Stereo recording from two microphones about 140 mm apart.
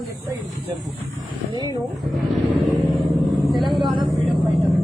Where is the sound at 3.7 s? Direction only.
35° right (ahead or behind).